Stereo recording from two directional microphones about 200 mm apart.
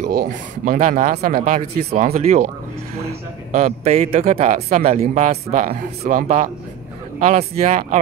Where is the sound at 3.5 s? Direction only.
35° right (ahead or behind).